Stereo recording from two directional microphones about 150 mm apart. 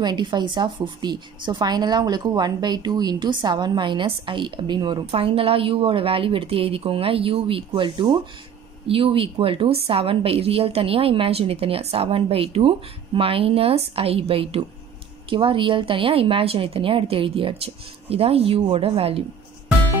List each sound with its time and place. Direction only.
0.0 s a woman's voice: 30° right (ahead or behind)